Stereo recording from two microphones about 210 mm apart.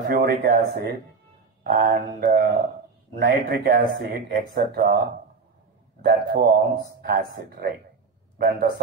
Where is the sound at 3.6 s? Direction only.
45° right (ahead or behind).